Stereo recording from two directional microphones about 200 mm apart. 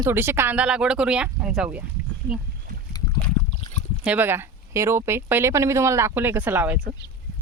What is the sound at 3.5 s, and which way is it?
Rowboat, 30° left (ahead or behind).